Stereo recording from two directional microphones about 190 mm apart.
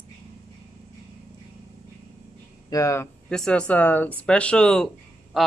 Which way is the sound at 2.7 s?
15° left (ahead or behind).